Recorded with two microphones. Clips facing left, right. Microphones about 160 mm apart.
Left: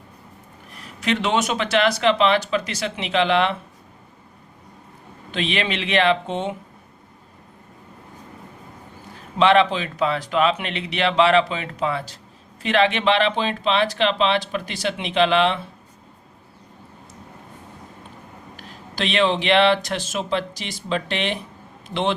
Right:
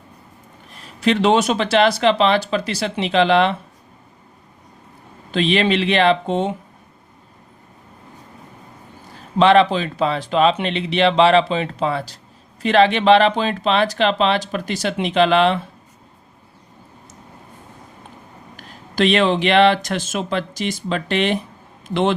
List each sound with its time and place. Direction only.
1.0 s speech: 35° right (ahead or behind)
5.3 s speech: 35° right (ahead or behind)
9.4 s speech: 35° right (ahead or behind)
18.5 s speech: 45° right (ahead or behind)